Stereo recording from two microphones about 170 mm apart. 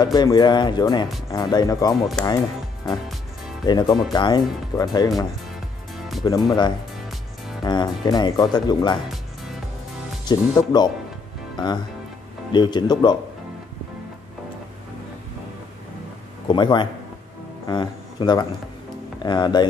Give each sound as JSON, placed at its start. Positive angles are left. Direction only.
{"t": 0.0, "sound": "speech", "side_deg": 25}
{"t": 2.2, "sound": "speech", "side_deg": 5}
{"t": 3.6, "sound": "speech", "side_deg": 25}
{"t": 6.2, "sound": "speech", "side_deg": 25}
{"t": 10.2, "sound": "speech", "side_deg": 25}
{"t": 16.4, "sound": "speech", "side_deg": 25}